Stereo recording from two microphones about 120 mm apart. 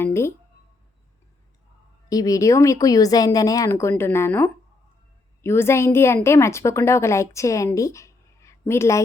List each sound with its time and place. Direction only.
0.0 s speech: 20° left (ahead or behind)
2.0 s speech: 30° left (ahead or behind)
7.8 s a sound: 25° left (ahead or behind)